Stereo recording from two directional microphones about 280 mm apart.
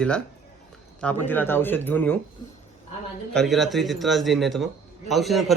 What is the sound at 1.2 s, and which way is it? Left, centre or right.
Speech, centre.